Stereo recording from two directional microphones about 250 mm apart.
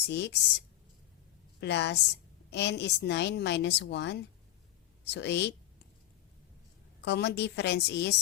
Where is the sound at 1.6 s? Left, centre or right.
Left.